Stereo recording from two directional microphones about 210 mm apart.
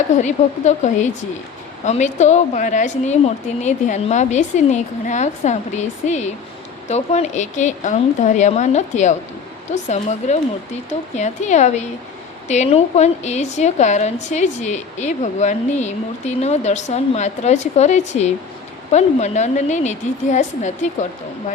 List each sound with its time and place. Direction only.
0.2 s a woman's voice: 35° left (ahead or behind)